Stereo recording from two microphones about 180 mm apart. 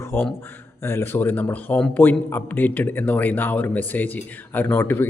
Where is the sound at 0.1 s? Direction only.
10° left (ahead or behind).